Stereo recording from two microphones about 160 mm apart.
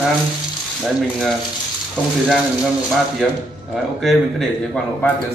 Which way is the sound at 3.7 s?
Centre (ahead or behind).